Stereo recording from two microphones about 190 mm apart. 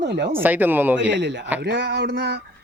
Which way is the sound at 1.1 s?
70° right (ahead or behind).